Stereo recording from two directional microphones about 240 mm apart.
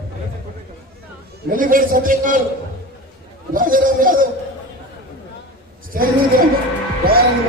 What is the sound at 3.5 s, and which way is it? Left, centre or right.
Speech, right.